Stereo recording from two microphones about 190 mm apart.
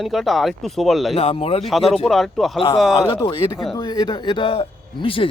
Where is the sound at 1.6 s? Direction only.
Centre (ahead or behind).